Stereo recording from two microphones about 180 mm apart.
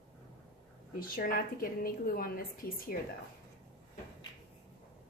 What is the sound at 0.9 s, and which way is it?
A woman's voice, 55° left (ahead or behind).